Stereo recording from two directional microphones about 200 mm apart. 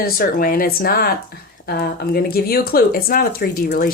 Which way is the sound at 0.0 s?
45° left (ahead or behind).